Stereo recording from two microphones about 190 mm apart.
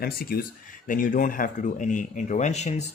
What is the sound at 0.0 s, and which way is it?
Speech, 50° left (ahead or behind).